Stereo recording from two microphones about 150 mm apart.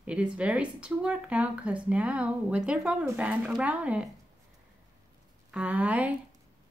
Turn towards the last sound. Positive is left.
turn(degrees=-10)  # may be behind; listen again after turning